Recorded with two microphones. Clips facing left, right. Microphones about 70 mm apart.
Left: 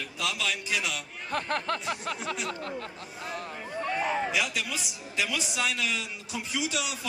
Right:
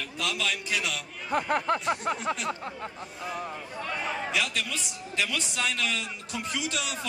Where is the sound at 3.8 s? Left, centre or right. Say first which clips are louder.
Left 4 dB; centre.